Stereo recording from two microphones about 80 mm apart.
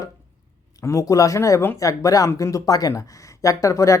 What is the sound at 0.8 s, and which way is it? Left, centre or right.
Speech, left.